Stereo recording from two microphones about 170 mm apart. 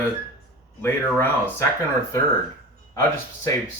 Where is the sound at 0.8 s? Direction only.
15° left (ahead or behind).